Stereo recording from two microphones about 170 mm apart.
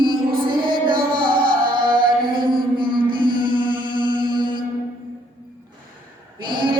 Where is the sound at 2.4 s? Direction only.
30° right (ahead or behind).